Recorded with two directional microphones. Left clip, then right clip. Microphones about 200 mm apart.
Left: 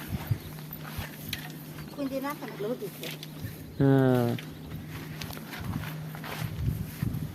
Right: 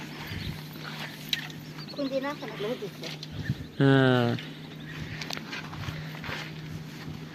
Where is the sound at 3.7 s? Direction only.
10° left (ahead or behind).